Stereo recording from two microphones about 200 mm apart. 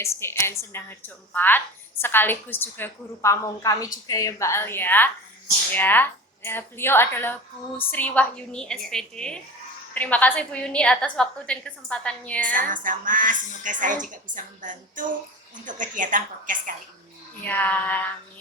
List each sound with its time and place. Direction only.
0.0 s a woman's voice: 10° left (ahead or behind)
12.5 s a woman's voice: 40° right (ahead or behind)
17.4 s a woman's voice: 10° left (ahead or behind)